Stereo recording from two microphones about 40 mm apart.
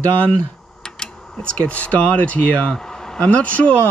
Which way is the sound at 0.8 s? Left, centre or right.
Centre.